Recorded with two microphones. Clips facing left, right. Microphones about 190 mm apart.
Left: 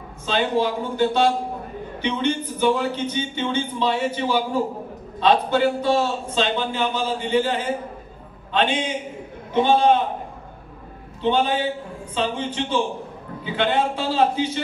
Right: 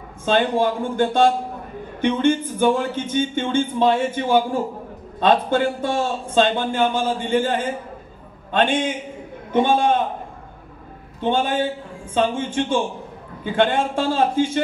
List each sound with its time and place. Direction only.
0.2 s speech: 50° right (ahead or behind)
11.1 s speech: 50° right (ahead or behind)